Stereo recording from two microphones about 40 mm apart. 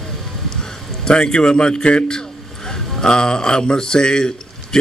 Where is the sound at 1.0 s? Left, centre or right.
Centre.